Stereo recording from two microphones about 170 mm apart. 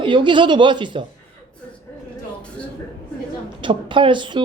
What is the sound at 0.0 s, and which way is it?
Speech, 30° right (ahead or behind).